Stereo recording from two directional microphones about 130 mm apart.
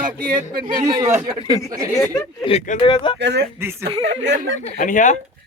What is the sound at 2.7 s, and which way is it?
Speech, 80° left.